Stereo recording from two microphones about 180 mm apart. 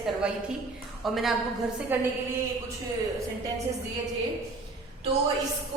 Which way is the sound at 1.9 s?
10° right (ahead or behind).